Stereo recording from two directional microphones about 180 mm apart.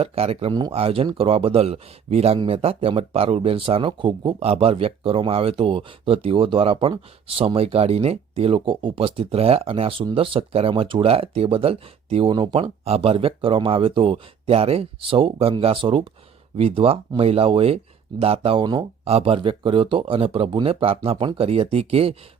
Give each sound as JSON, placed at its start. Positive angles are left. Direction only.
{"t": 0.0, "sound": "speech", "side_deg": -35}